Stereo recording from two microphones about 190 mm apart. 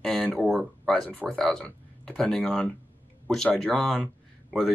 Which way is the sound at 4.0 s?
Centre (ahead or behind).